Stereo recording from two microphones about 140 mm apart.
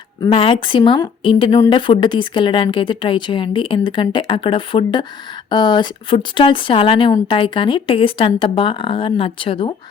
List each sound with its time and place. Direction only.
0.2 s speech: 35° left (ahead or behind)